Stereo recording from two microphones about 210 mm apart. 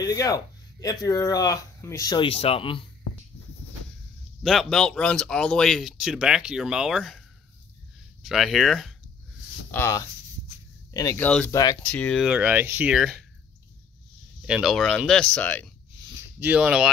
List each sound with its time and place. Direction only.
0.0 s speech: 15° left (ahead or behind)
4.4 s speech: centre (ahead or behind)
9.7 s speech: 10° left (ahead or behind)
11.2 s speech: 5° left (ahead or behind)
14.4 s speech: centre (ahead or behind)
16.2 s speech: 10° right (ahead or behind)